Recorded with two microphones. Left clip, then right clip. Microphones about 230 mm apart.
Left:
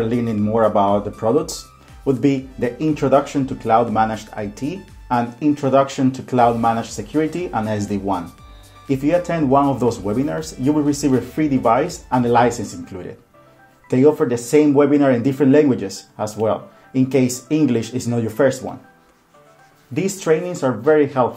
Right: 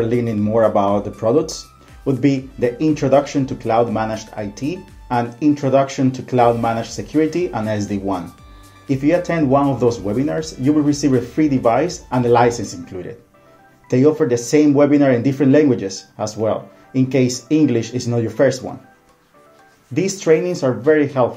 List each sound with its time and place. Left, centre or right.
0.0 s speech: centre
19.9 s speech: centre